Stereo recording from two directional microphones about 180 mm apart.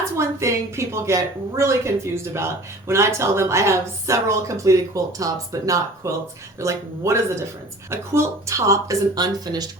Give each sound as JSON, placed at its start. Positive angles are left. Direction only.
{"t": 0.0, "sound": "speech", "side_deg": -15}